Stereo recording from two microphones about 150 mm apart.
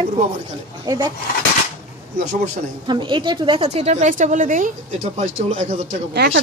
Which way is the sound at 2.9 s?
30° right (ahead or behind).